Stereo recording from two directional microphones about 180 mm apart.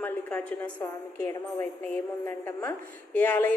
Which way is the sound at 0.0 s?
10° left (ahead or behind).